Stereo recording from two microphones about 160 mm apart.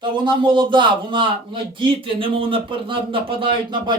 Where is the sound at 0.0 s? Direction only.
30° right (ahead or behind).